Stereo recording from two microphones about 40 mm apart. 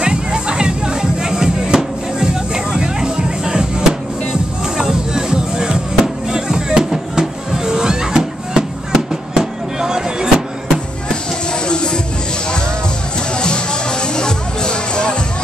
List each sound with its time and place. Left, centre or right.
0.0 s music: right
11.6 s music: left
13.3 s music: left